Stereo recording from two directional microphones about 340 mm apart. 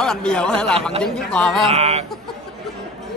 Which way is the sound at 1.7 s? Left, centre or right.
Centre.